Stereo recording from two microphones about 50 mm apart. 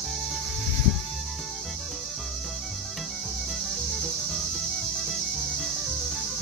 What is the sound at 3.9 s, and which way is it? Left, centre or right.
Music, centre.